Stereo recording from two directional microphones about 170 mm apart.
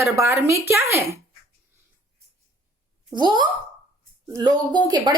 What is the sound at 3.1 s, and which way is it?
A woman's voice, 25° right (ahead or behind).